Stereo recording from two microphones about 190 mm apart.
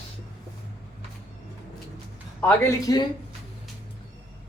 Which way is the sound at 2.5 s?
15° left (ahead or behind).